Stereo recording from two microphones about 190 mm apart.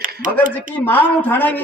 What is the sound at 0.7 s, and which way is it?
Speech, 10° left (ahead or behind).